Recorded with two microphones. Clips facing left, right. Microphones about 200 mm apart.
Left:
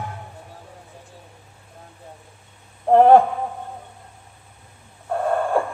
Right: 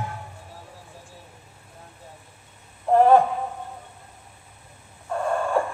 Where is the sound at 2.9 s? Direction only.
60° left (ahead or behind).